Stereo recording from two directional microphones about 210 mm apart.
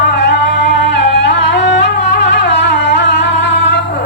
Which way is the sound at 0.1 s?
55° left (ahead or behind).